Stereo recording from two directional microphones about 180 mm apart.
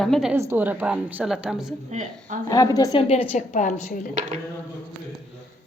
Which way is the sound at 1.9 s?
45° right (ahead or behind).